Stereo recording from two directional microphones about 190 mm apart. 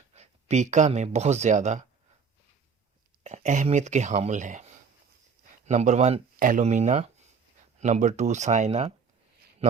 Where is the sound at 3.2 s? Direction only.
40° right (ahead or behind).